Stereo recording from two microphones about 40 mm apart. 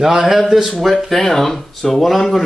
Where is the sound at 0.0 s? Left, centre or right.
Centre.